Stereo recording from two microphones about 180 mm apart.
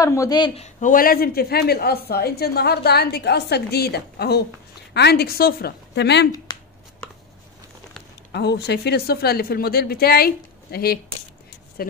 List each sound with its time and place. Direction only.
0.0 s speech: 20° left (ahead or behind)
0.6 s a woman's voice: 40° left (ahead or behind); by 6.2 s 70° left (ahead or behind)
6.3 s a sound: 25° left (ahead or behind)
8.3 s a woman's voice: 65° left (ahead or behind)